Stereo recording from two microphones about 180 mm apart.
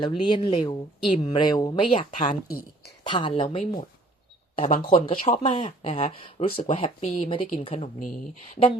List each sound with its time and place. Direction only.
0.0 s speech: 25° left (ahead or behind)
2.0 s speech: 45° left (ahead or behind)
3.1 s speech: 25° left (ahead or behind)
4.8 s speech: 30° left (ahead or behind)